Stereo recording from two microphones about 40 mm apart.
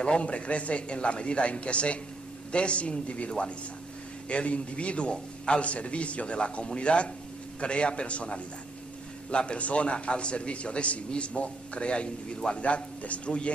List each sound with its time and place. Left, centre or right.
0.0 s speech: left
12.6 s speech: left